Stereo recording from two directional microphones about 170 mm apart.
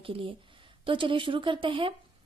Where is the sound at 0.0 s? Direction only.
30° right (ahead or behind).